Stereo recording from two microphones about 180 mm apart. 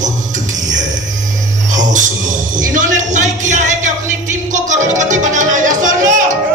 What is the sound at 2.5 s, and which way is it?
Music, 45° right (ahead or behind).